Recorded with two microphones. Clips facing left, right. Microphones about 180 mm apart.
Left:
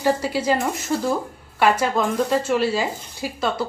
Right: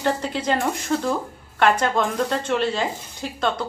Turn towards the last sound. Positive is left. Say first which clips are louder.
# even
turn(degrees=5)  # may be behind; listen again after turning